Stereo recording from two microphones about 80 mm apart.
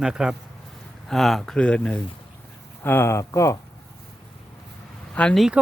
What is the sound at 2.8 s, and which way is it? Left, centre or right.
Speech, left.